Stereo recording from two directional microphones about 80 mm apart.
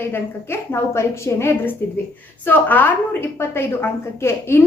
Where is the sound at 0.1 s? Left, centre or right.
Left.